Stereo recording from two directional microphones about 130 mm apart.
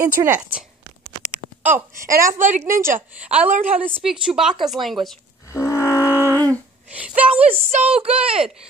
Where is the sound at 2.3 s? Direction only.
75° right (ahead or behind).